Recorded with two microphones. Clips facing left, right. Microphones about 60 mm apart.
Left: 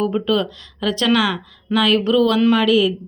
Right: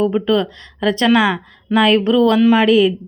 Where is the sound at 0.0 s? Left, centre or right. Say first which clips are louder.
Right 3 dB; right.